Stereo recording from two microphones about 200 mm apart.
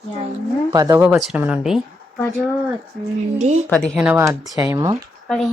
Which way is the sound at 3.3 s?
35° right (ahead or behind).